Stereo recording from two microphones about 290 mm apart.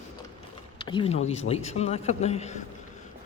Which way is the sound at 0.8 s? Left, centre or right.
Centre.